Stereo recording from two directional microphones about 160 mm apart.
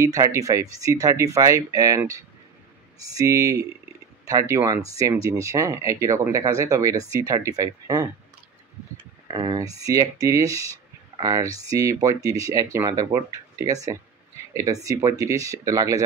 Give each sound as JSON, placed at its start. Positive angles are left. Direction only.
{"t": 0.0, "sound": "speech", "side_deg": -20}
{"t": 9.3, "sound": "speech", "side_deg": -25}